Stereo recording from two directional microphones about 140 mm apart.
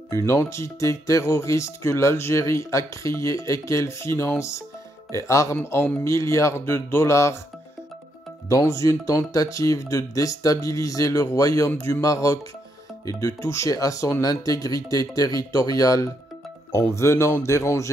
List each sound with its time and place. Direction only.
0.1 s speech: 20° left (ahead or behind)
8.5 s speech: 20° left (ahead or behind)